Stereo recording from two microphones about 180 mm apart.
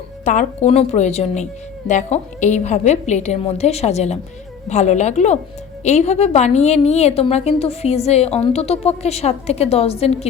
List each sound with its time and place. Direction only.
0.3 s a woman's voice: 40° left (ahead or behind)